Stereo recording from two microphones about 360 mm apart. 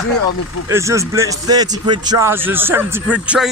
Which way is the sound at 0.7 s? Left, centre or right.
Centre.